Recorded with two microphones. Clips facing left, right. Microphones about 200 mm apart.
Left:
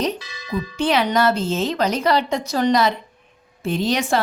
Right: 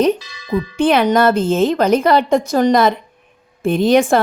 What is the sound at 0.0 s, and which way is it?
Speech, 55° right (ahead or behind).